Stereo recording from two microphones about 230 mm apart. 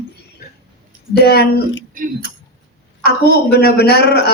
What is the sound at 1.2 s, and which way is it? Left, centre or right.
Speech, left.